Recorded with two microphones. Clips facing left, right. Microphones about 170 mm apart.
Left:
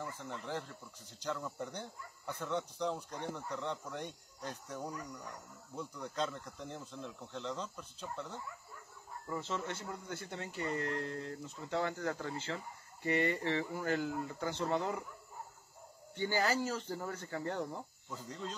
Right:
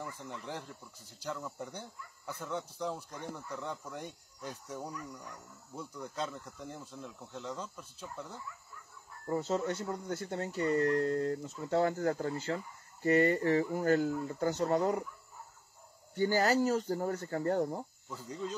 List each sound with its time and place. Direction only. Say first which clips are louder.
0.2 s speech: left 1 dB; 15° right (ahead or behind)
9.3 s speech: right 7 dB; 45° right (ahead or behind)
16.2 s speech: right 5 dB; 40° right (ahead or behind)